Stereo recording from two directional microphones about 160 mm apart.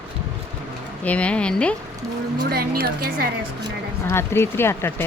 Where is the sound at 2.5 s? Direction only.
70° right (ahead or behind).